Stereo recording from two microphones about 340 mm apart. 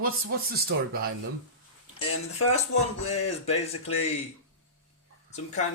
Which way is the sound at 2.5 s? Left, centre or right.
Centre.